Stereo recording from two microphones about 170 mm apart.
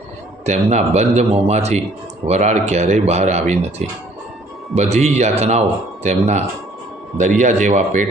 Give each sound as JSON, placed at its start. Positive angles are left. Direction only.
{"t": 0.4, "sound": "speech", "side_deg": -40}